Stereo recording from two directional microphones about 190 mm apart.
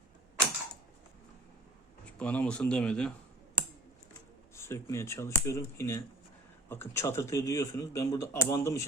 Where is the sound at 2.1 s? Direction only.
5° left (ahead or behind).